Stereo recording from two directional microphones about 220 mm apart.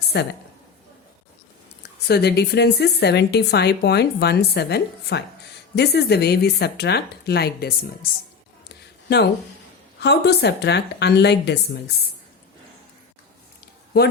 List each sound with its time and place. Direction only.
0.1 s a woman's voice: 50° left (ahead or behind)
1.8 s a woman's voice: 45° left (ahead or behind)
8.7 s a sound: 50° left (ahead or behind)
10.0 s a woman's voice: 50° left (ahead or behind)